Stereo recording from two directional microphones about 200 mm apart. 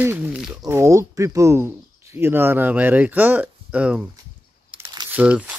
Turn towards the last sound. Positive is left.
turn(degrees=-5)  # may be behind; listen again after turning